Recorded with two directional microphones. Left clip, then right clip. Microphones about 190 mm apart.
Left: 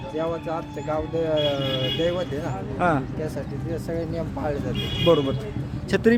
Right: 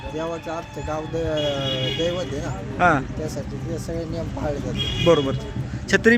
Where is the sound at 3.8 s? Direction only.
20° left (ahead or behind).